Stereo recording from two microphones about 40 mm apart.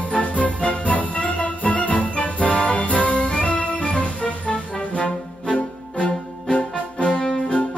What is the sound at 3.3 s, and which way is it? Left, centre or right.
Music, left.